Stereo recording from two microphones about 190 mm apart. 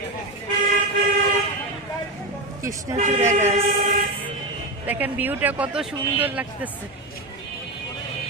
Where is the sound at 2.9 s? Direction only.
40° right (ahead or behind).